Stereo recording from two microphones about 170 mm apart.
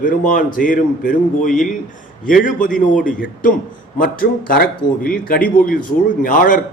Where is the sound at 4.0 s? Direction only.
60° left (ahead or behind).